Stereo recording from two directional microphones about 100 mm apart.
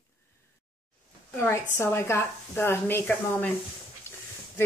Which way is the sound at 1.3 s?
25° left (ahead or behind).